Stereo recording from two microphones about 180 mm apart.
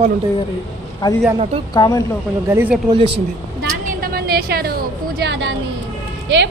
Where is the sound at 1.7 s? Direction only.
20° left (ahead or behind).